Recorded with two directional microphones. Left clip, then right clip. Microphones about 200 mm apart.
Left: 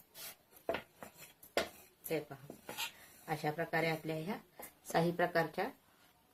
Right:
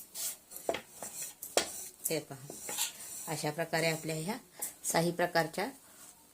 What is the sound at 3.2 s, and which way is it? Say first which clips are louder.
Speech: right 2 dB; 30° right (ahead or behind).